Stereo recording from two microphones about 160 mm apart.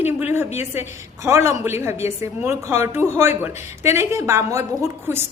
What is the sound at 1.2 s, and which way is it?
A woman's voice, 15° right (ahead or behind).